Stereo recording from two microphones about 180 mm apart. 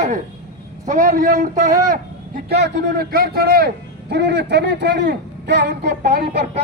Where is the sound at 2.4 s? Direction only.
70° right (ahead or behind).